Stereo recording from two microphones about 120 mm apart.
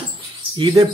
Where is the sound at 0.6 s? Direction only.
30° right (ahead or behind).